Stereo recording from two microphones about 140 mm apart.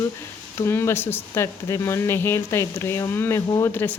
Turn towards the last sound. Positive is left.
turn(degrees=15)  # may be behind; listen again after turning